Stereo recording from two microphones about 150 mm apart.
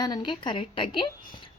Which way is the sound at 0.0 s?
30° left (ahead or behind).